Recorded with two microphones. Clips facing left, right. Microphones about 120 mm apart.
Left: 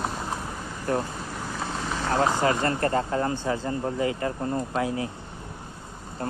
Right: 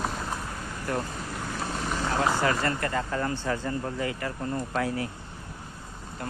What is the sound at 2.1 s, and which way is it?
Speech, 20° left (ahead or behind).